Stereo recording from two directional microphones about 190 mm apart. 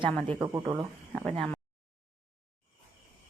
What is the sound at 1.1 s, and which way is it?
Speech, centre (ahead or behind).